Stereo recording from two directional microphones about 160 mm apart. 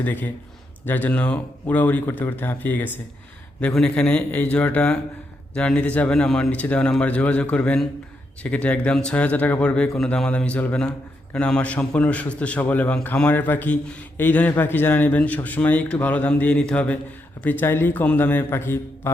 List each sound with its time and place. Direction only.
0.0 s a man's voice: 10° left (ahead or behind)